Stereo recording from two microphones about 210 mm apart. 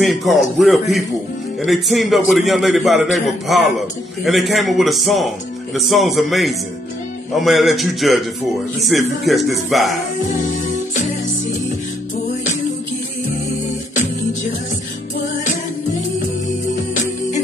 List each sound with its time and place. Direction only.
0.0 s a man's voice: centre (ahead or behind)
10.7 s music: 35° left (ahead or behind)
16.9 s music: 35° left (ahead or behind)